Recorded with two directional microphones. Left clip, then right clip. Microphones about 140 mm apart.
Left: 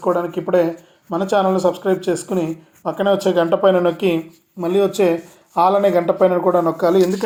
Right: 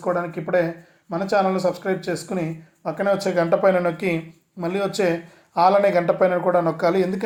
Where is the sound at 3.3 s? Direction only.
20° right (ahead or behind).